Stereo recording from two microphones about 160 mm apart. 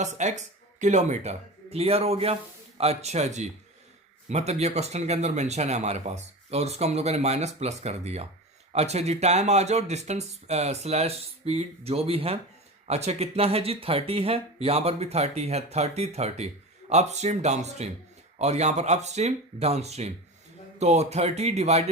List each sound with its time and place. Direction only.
0.0 s speech: 45° right (ahead or behind)